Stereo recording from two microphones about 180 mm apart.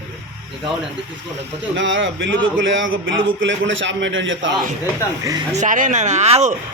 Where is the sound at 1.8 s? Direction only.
90° right.